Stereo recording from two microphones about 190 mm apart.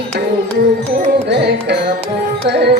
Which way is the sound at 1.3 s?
60° right (ahead or behind).